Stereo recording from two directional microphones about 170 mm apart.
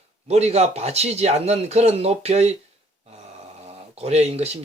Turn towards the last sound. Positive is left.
turn(degrees=-40)  # may be behind; listen again after turning